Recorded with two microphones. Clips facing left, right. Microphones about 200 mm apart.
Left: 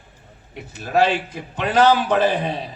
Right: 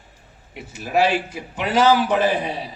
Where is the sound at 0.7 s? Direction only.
10° right (ahead or behind).